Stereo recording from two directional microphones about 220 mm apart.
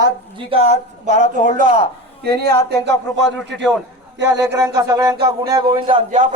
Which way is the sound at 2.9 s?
55° right (ahead or behind).